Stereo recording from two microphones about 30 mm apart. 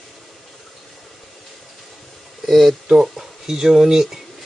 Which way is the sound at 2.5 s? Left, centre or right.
Centre.